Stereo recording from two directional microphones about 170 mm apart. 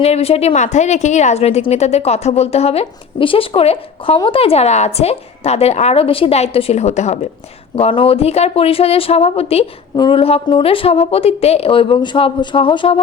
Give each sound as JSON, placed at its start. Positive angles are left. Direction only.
{"t": 0.0, "sound": "a woman's voice", "side_deg": 35}